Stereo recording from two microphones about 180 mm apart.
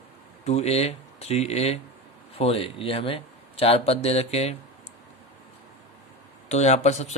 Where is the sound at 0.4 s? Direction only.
35° left (ahead or behind).